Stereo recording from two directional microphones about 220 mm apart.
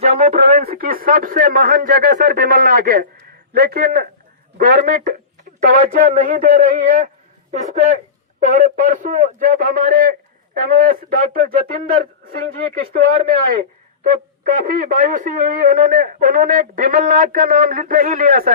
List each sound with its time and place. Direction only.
0.0 s a man's voice: 30° right (ahead or behind)
13.0 s speech: 40° right (ahead or behind)